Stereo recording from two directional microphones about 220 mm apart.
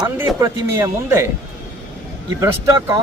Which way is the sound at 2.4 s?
15° right (ahead or behind).